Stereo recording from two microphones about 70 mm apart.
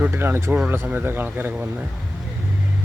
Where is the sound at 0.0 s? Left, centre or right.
Right.